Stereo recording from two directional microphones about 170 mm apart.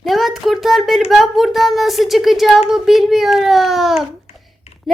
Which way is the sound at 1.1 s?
Centre (ahead or behind).